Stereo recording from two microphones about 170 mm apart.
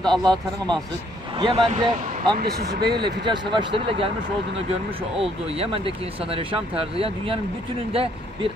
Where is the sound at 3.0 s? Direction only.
25° right (ahead or behind).